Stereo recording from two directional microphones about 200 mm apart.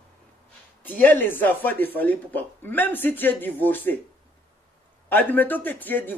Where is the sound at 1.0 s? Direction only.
10° left (ahead or behind).